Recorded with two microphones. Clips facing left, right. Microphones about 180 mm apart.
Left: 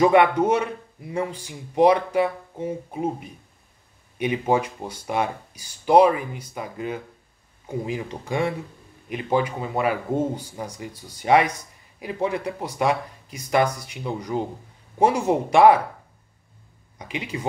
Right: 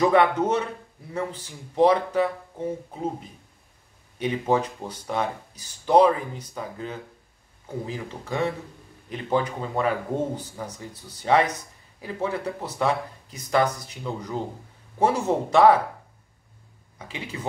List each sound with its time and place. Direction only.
0.0 s speech: 10° left (ahead or behind)
17.0 s speech: 15° left (ahead or behind)